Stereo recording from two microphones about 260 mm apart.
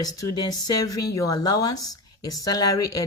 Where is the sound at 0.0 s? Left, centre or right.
Centre.